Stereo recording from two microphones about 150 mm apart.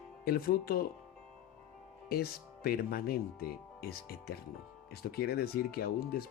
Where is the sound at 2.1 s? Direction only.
85° left.